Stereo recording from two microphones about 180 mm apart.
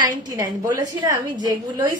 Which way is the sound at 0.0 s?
20° right (ahead or behind).